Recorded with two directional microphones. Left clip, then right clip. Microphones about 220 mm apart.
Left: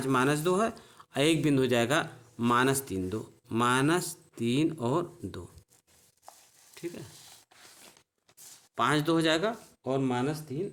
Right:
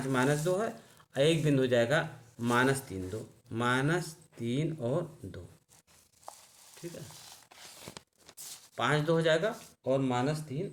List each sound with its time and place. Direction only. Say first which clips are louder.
0.1 s speech: left 3 dB; 45° left (ahead or behind)
8.7 s speech: left 2 dB; 45° left (ahead or behind)